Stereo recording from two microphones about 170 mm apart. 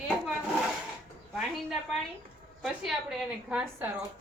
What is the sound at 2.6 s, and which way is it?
Speech, 5° right (ahead or behind).